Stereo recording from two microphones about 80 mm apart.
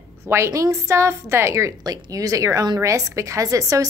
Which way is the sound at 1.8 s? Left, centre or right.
Right.